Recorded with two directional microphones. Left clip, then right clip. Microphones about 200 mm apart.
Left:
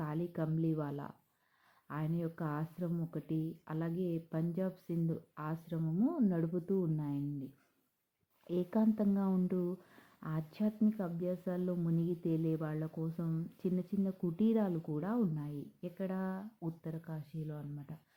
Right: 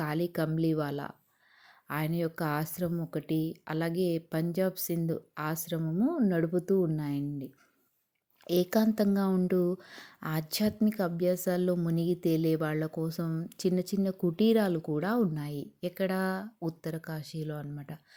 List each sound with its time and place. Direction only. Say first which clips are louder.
0.0 s a woman's voice: right 8 dB; 30° right (ahead or behind)
8.4 s a woman's voice: right 7 dB; 25° right (ahead or behind)